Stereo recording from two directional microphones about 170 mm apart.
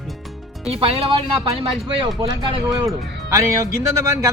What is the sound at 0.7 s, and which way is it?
Speech, 35° right (ahead or behind).